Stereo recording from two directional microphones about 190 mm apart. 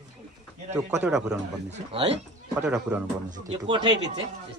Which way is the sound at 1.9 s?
30° right (ahead or behind).